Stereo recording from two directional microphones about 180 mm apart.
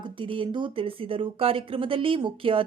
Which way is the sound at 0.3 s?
25° right (ahead or behind).